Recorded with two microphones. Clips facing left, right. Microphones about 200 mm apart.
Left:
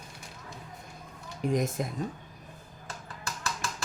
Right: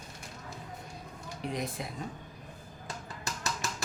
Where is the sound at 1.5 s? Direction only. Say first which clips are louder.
Left 8 dB; 45° left (ahead or behind).